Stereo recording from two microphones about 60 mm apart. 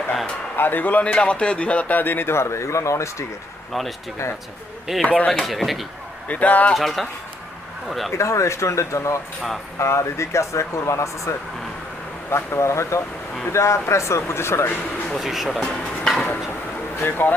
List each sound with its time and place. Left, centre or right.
0.5 s a man's voice: left
3.7 s speech: centre
5.0 s speech: left
5.3 s speech: centre
6.2 s speech: left
6.7 s speech: centre
8.1 s speech: left
15.1 s speech: centre
17.2 s a man's voice: left